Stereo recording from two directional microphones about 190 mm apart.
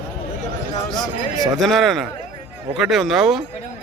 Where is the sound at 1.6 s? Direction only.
Centre (ahead or behind).